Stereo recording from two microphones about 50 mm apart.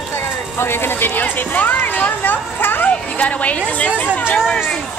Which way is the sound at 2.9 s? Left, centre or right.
Left.